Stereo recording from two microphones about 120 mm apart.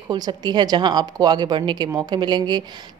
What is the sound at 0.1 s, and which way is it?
Speech, 35° right (ahead or behind).